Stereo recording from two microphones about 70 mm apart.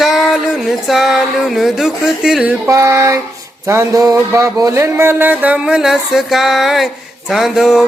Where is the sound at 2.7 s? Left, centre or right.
Right.